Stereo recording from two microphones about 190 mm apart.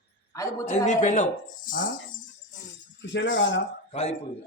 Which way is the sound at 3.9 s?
35° left (ahead or behind).